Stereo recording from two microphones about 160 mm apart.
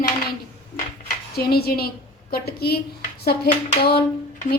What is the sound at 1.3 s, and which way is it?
A woman's voice, 75° left (ahead or behind).